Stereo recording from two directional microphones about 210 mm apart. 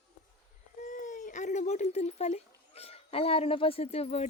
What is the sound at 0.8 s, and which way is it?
Speech, 35° left (ahead or behind).